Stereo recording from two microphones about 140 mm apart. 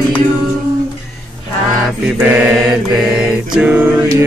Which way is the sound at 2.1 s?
15° right (ahead or behind).